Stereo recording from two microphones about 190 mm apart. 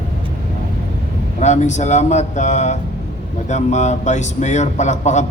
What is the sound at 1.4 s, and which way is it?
A man's voice, 40° left (ahead or behind).